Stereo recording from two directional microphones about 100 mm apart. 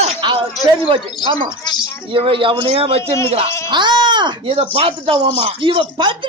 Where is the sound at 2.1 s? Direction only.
60° right (ahead or behind).